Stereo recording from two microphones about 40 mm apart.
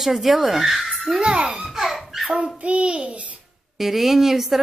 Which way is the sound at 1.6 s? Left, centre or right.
Centre.